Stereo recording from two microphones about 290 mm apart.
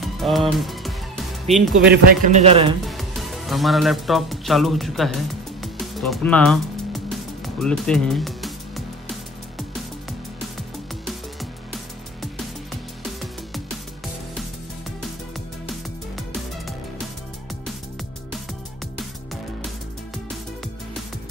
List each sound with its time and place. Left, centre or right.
0.0 s music: centre
1.8 s a man's voice: right
2.8 s music: centre
13.2 s music: centre